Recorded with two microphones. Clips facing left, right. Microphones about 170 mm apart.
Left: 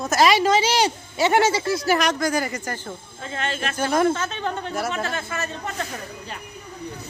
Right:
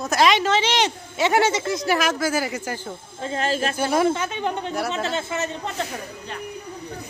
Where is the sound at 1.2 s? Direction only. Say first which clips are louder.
Left 1 dB; 5° left (ahead or behind).